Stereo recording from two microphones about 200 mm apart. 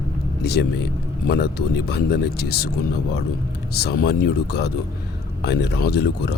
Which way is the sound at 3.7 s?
50° left (ahead or behind).